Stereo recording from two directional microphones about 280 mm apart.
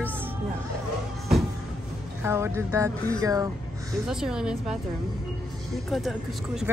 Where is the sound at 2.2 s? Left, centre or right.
Centre.